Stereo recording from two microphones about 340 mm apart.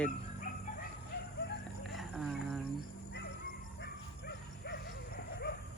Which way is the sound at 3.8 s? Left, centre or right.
Left.